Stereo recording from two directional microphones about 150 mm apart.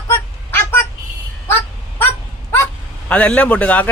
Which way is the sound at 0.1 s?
15° left (ahead or behind).